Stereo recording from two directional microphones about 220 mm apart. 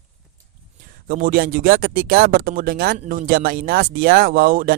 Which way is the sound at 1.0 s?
40° right (ahead or behind).